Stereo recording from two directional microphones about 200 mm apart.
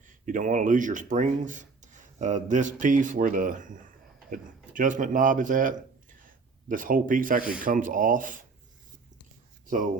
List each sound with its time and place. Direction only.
0.0 s speech: 40° right (ahead or behind)
9.6 s speech: 40° right (ahead or behind)